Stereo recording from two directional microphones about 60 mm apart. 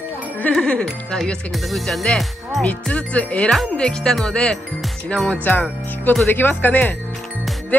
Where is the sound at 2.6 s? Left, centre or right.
Left.